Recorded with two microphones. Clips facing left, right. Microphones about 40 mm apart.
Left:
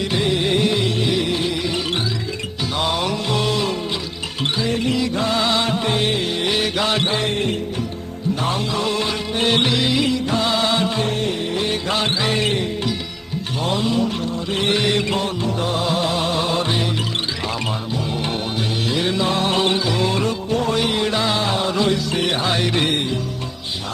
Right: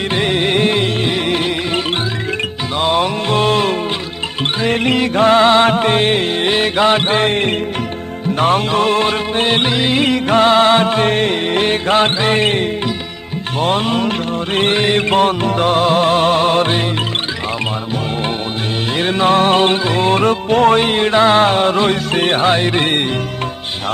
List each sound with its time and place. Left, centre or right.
0.1 s music: right
2.7 s music: right
9.9 s music: right
18.9 s music: right